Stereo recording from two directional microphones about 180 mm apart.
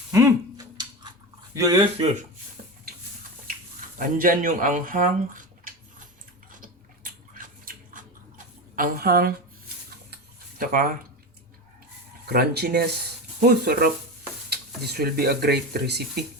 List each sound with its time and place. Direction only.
0.1 s a sound: 15° right (ahead or behind)
1.5 s speech: 20° right (ahead or behind)
3.9 s speech: 50° right (ahead or behind)
6.5 s a sound: 50° right (ahead or behind)
8.7 s speech: 55° right (ahead or behind)
10.6 s speech: 50° right (ahead or behind)
12.2 s speech: 60° right (ahead or behind)